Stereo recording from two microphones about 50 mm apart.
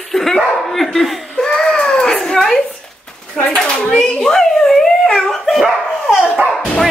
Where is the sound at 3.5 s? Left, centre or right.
Centre.